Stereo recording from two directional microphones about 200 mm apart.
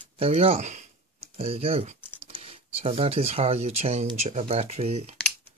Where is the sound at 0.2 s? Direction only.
30° right (ahead or behind).